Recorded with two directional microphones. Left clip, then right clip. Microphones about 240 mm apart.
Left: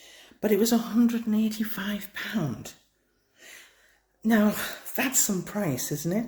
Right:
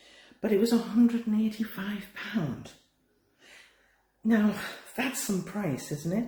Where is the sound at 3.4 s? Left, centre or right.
Left.